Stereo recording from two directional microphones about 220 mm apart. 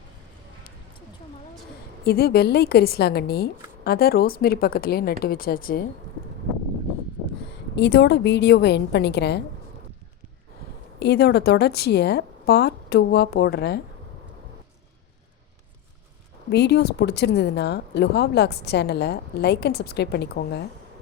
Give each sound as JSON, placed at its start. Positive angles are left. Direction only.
{"t": 2.0, "sound": "speech", "side_deg": 45}
{"t": 7.8, "sound": "speech", "side_deg": 50}
{"t": 11.0, "sound": "speech", "side_deg": 50}
{"t": 16.5, "sound": "speech", "side_deg": 50}